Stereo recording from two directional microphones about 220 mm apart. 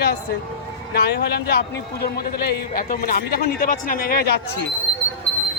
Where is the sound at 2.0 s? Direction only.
45° left (ahead or behind).